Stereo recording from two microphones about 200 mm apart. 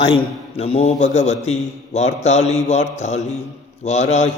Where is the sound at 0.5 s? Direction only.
30° left (ahead or behind).